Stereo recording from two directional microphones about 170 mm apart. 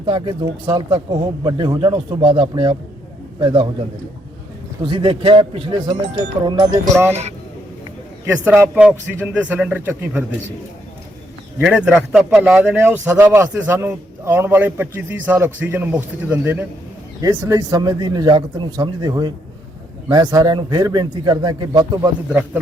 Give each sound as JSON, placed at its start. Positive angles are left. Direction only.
{"t": 0.0, "sound": "speech", "side_deg": -30}
{"t": 4.8, "sound": "speech", "side_deg": -30}
{"t": 8.3, "sound": "a man's voice", "side_deg": -10}
{"t": 11.6, "sound": "a man's voice", "side_deg": -5}